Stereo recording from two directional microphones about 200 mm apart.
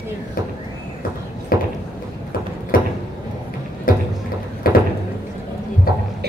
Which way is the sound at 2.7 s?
45° left (ahead or behind).